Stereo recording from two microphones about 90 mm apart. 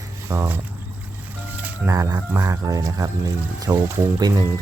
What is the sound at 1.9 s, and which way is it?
Speech, 40° right (ahead or behind).